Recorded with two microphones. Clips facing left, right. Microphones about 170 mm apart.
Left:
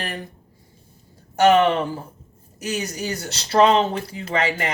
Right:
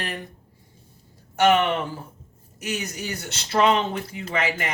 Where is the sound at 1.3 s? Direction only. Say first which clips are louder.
Left 4 dB; 35° left (ahead or behind).